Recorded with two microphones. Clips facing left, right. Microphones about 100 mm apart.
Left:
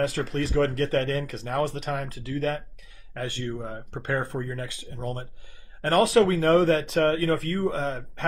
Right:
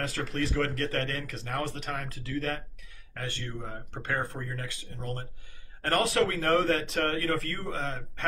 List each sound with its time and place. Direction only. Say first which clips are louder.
0.0 s speech: left 5 dB; 20° left (ahead or behind)